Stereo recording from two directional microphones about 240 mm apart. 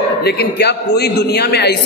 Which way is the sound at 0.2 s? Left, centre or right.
Left.